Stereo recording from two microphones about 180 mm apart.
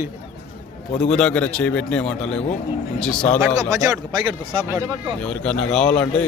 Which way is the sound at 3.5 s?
15° right (ahead or behind).